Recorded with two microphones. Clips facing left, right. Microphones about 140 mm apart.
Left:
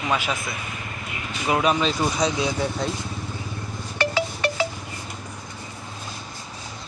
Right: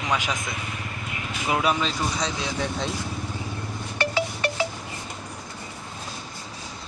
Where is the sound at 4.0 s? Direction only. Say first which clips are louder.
Left 2 dB; 90° left.